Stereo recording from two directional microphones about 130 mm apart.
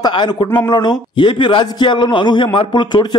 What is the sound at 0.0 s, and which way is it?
A man's voice, 35° left (ahead or behind).